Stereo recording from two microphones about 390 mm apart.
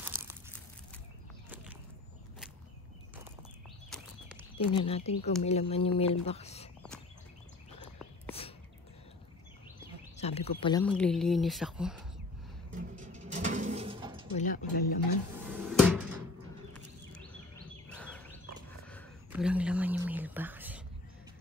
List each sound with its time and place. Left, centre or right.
0.0 s crumpling: centre
3.9 s a sound: centre
4.7 s speech: centre
10.1 s speech: centre
12.7 s a sound: centre
14.3 s speech: centre
15.4 s cupboard open or close: centre
17.8 s a sound: centre
18.9 s whispering: centre